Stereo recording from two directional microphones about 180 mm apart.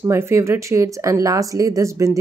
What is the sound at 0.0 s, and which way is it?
Speech, 15° right (ahead or behind).